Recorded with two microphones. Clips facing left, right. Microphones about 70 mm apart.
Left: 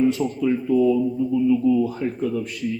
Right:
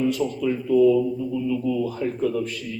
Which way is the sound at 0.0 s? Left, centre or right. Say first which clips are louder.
Left 3 dB; left.